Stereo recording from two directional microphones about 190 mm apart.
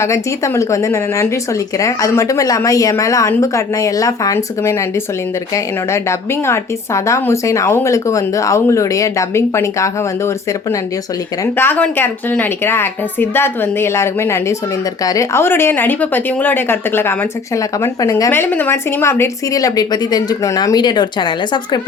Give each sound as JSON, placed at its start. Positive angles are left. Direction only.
{"t": 0.0, "sound": "a woman's voice", "side_deg": 15}